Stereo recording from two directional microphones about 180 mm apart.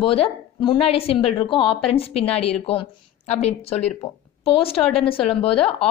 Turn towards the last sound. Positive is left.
turn(degrees=30)  # may be behind; listen again after turning